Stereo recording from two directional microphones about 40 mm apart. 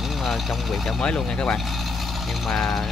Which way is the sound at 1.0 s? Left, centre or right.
Left.